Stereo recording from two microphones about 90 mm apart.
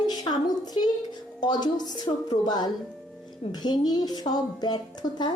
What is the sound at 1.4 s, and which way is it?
A woman's voice, 50° left (ahead or behind).